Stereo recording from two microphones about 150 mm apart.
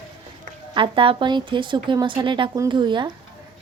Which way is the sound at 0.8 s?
35° right (ahead or behind).